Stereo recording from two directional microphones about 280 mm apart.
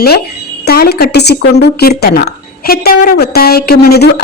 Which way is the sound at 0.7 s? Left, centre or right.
Left.